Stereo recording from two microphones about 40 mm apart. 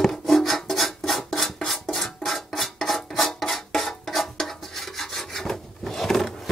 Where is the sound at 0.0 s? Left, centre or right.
Centre.